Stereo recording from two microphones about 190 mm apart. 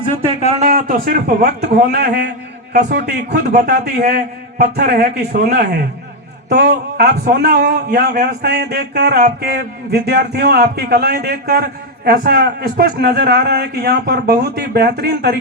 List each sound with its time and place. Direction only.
0.1 s a man's voice: 35° right (ahead or behind); by 2.3 s 60° right (ahead or behind)
3.7 s a man's voice: 55° right (ahead or behind)